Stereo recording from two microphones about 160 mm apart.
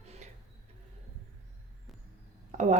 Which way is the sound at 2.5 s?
50° right (ahead or behind).